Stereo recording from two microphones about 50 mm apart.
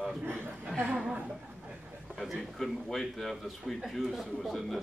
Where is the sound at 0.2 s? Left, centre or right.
Right.